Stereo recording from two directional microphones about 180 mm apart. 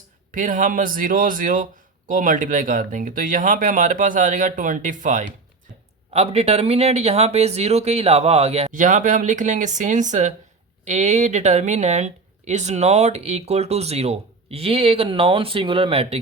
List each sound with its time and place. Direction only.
0.3 s speech: 45° right (ahead or behind)